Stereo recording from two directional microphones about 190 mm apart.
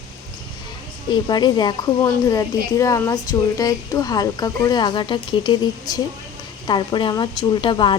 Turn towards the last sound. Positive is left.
turn(degrees=25)  # may be behind; listen again after turning